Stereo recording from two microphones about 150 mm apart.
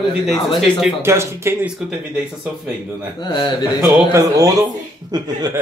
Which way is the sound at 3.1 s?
30° left (ahead or behind).